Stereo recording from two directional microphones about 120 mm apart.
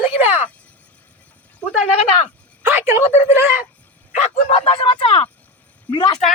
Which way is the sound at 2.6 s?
20° right (ahead or behind).